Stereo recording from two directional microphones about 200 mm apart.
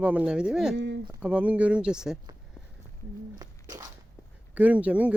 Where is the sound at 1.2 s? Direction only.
5° right (ahead or behind).